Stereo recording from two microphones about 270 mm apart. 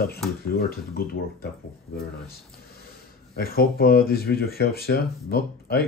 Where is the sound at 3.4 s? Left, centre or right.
Left.